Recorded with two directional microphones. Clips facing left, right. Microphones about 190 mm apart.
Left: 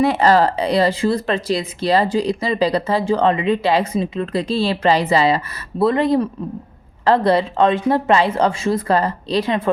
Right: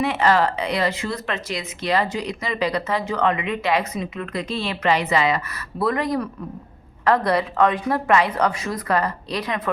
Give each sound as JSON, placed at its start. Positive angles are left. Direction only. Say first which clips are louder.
{"t": 0.0, "sound": "a woman's voice", "louder": "left 5 dB", "side_deg": 35}